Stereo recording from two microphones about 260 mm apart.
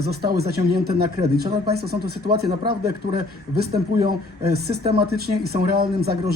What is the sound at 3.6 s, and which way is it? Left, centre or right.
Speech, right.